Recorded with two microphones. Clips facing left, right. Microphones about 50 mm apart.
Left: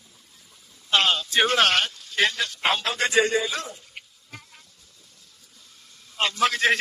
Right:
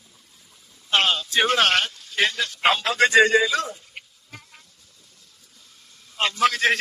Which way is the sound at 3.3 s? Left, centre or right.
Right.